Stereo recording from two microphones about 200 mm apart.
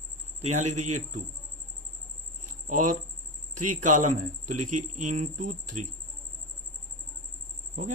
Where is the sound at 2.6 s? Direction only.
40° right (ahead or behind).